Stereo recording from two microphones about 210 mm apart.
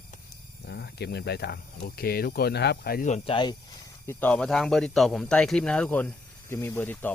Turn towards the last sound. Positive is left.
turn(degrees=10)  # may be behind; listen again after turning